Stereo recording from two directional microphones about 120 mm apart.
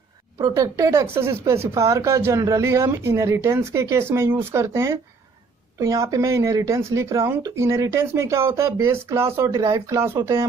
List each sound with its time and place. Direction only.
0.4 s speech: 30° right (ahead or behind)